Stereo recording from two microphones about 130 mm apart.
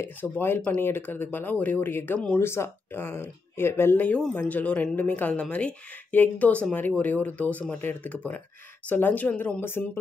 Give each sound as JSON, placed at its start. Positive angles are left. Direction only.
{"t": 0.0, "sound": "speech", "side_deg": 15}